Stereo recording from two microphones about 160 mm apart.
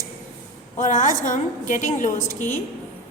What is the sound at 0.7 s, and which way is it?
A woman's voice, 55° left (ahead or behind).